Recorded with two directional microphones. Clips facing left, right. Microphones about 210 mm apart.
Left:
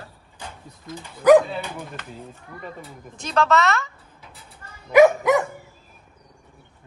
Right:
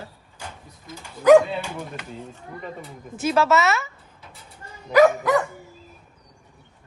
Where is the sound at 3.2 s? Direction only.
5° right (ahead or behind).